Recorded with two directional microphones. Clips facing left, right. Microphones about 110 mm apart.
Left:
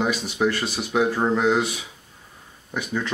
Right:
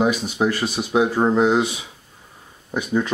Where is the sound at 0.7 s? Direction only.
15° right (ahead or behind).